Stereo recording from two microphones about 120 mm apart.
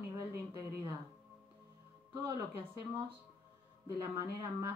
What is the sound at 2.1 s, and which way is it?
Speech, 25° right (ahead or behind).